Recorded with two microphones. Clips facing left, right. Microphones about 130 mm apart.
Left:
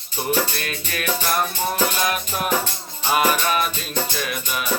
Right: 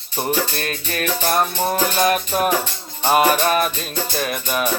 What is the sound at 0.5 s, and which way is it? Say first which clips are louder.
Music: right 4 dB; 40° right (ahead or behind).